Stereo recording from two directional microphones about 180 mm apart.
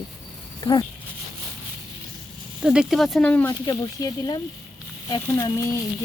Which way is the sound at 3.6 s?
20° left (ahead or behind).